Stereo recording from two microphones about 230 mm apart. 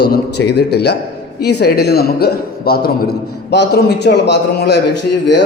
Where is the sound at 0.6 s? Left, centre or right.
Left.